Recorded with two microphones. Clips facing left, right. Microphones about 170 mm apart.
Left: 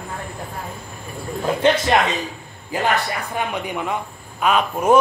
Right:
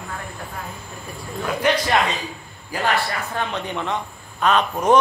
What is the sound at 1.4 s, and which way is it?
A man's voice, 25° left (ahead or behind).